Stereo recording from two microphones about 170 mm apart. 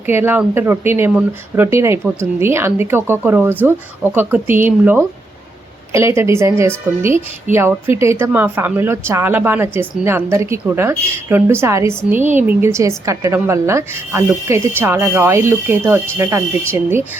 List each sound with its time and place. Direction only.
0.0 s speech: 10° right (ahead or behind)